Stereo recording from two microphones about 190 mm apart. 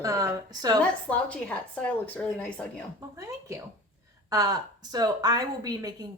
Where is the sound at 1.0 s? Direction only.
5° left (ahead or behind).